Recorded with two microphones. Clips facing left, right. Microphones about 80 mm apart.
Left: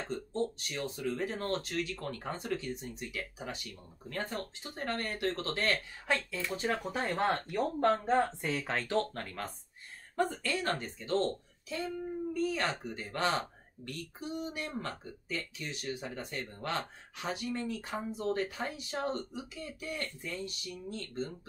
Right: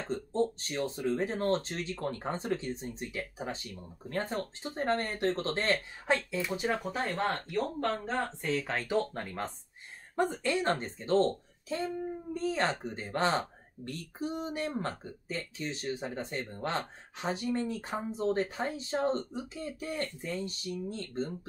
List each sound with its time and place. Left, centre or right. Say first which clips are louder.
0.0 s speech: right 4 dB; right; by 6.8 s centre
6.8 s speech: even; centre
7.2 s speech: left 1 dB; centre
8.6 s speech: right 1 dB; centre
9.1 s speech: right 3 dB; right